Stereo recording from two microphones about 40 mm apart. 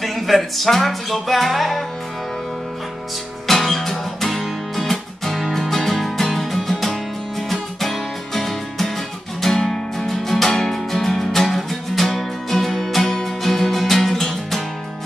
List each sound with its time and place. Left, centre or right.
0.0 s music: centre
3.4 s music: centre